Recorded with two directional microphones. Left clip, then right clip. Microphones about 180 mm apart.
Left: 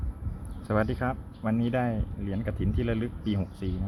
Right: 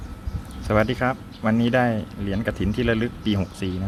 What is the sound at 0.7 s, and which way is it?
Speech, 5° right (ahead or behind).